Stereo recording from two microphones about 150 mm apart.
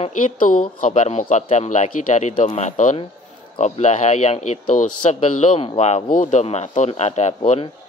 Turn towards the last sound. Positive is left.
turn(degrees=50)  # may be behind; listen again after turning